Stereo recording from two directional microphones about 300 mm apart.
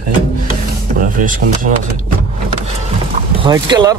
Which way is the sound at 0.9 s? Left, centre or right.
Right.